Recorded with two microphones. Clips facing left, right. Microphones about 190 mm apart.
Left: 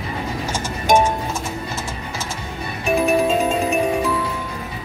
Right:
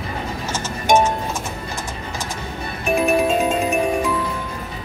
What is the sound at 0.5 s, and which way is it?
Music, 10° left (ahead or behind).